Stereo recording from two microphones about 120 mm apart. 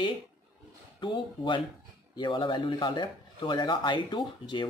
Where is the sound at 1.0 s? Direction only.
40° left (ahead or behind).